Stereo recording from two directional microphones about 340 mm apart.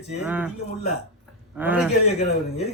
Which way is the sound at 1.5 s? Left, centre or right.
Centre.